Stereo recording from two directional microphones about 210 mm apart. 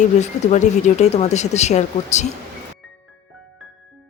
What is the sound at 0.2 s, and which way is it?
Speech, 35° left (ahead or behind).